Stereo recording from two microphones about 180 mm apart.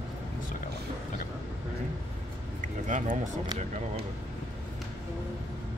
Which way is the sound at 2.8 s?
45° right (ahead or behind).